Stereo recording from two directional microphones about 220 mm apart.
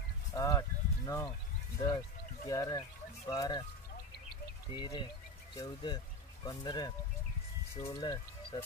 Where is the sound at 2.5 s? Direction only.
15° left (ahead or behind).